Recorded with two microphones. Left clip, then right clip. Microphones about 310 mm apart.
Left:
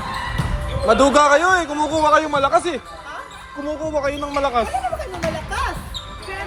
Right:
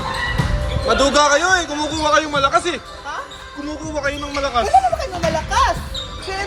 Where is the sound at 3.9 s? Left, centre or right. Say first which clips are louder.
Right 1 dB; centre.